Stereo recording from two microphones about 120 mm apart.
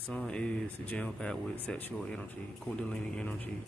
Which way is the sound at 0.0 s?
10° left (ahead or behind).